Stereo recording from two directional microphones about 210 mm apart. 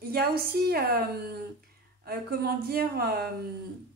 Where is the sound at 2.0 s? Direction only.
45° right (ahead or behind).